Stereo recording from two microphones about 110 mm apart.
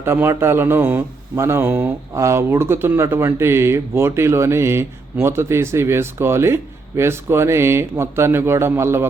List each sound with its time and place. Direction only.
0.0 s speech: 25° right (ahead or behind)